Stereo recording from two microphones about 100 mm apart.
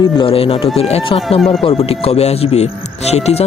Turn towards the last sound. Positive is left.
turn(degrees=90)